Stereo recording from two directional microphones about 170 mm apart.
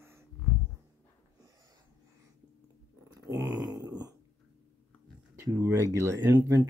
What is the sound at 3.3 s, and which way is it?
Grunt, 20° right (ahead or behind).